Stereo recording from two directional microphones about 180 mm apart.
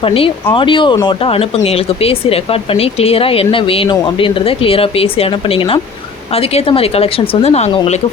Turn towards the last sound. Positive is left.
turn(degrees=35)  # may be behind; listen again after turning